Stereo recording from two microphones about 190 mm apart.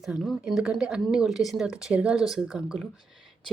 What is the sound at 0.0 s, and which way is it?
A woman's voice, centre (ahead or behind).